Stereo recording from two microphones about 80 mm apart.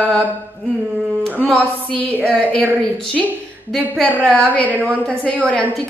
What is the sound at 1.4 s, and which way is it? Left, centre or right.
A woman's voice, centre.